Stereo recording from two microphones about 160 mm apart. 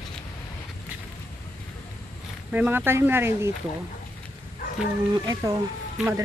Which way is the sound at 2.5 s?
10° right (ahead or behind).